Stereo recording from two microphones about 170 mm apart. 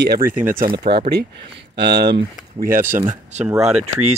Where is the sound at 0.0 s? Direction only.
65° right (ahead or behind).